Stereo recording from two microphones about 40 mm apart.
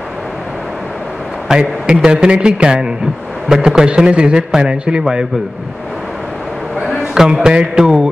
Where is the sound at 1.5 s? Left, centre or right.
Centre.